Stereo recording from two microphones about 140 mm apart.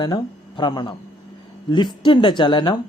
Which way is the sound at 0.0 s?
30° left (ahead or behind).